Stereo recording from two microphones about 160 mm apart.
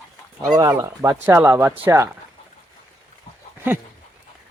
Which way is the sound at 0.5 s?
20° right (ahead or behind).